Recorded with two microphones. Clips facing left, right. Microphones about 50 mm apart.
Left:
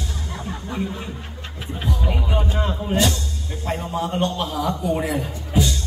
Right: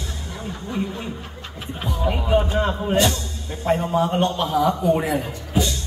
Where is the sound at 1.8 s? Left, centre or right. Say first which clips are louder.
Right 2 dB; centre.